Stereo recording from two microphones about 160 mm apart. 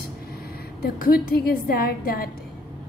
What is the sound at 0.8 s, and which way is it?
A woman's voice, 70° left (ahead or behind).